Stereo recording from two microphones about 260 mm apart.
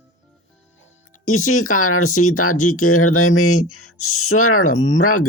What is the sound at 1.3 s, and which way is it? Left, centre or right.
Speech, left.